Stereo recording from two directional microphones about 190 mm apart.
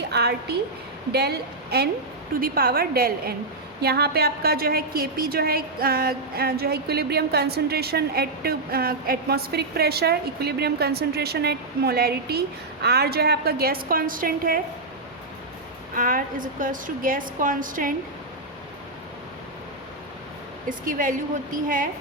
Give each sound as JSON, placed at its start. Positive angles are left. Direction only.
{"t": 0.1, "sound": "a sound", "side_deg": -60}
{"t": 1.1, "sound": "a woman's voice", "side_deg": -55}
{"t": 16.0, "sound": "a woman's voice", "side_deg": -45}
{"t": 20.7, "sound": "a woman's voice", "side_deg": -45}